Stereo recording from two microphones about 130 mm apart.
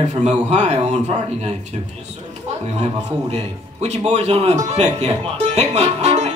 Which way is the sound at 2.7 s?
55° right (ahead or behind).